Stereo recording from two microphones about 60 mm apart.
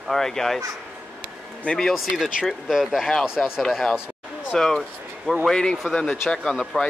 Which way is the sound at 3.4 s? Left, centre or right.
Centre.